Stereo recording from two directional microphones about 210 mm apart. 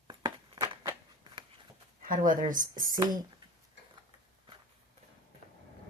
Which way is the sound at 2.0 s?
40° right (ahead or behind).